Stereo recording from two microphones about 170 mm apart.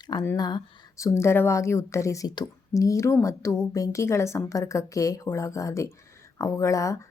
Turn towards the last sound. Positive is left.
turn(degrees=20)  # may be behind; listen again after turning